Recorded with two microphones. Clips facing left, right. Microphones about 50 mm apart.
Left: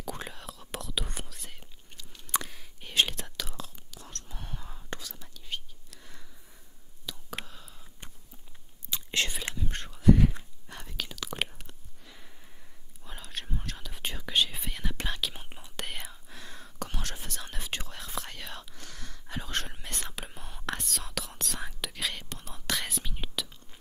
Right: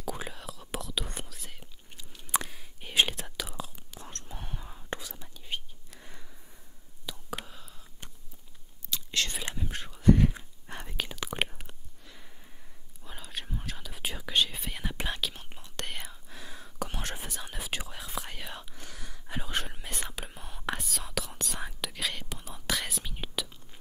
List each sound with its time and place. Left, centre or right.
0.0 s whispering: centre
2.0 s chewing: centre
2.4 s whispering: centre
3.9 s whispering: right; by 7.8 s centre
8.9 s whispering: left
9.7 s a sound: centre
10.7 s whispering: right
12.0 s sniff: centre
13.0 s whispering: centre
14.8 s whispering: centre
15.3 s whispering: centre
16.9 s whispering: centre
17.3 s whispering: centre